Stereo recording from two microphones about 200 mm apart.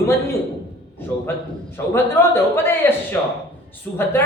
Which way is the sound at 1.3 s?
10° left (ahead or behind).